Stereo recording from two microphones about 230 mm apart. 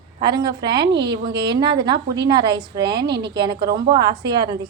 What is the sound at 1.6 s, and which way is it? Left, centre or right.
Speech, right.